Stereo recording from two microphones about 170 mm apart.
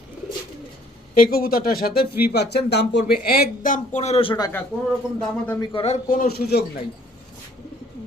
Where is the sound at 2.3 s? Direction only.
75° left (ahead or behind); by 4.5 s 30° left (ahead or behind).